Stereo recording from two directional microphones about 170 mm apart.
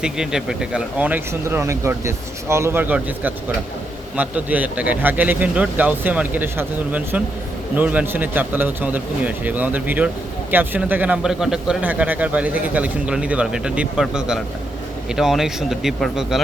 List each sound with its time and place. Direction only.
0.0 s a man's voice: 5° right (ahead or behind)